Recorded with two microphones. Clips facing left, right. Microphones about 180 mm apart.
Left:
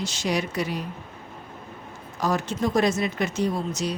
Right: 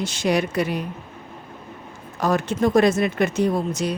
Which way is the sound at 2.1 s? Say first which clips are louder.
Right 4 dB; 55° right (ahead or behind).